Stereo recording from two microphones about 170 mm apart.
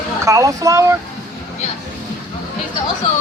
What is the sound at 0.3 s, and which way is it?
Speech, 20° right (ahead or behind).